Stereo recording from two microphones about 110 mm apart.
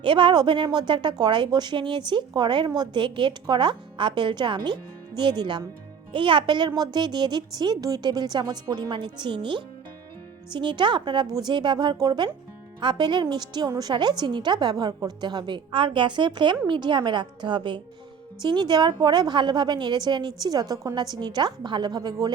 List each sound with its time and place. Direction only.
0.0 s a woman's voice: 50° right (ahead or behind)